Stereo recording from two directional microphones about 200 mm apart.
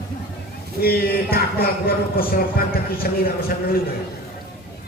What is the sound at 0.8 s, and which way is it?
Speech, 50° left (ahead or behind).